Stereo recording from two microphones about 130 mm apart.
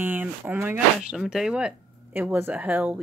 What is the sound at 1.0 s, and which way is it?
Speech, 5° right (ahead or behind).